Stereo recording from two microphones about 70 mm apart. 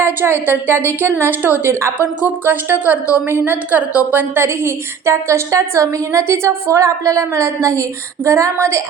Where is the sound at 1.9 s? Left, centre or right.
Right.